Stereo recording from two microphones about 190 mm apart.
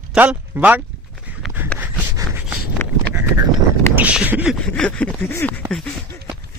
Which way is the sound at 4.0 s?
10° right (ahead or behind).